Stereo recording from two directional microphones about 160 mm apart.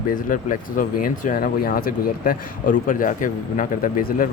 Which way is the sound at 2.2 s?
55° left (ahead or behind).